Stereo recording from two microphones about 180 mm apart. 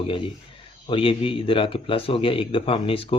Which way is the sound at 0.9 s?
30° left (ahead or behind).